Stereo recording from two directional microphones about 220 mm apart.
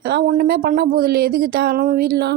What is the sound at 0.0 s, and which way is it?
Speech, 45° right (ahead or behind).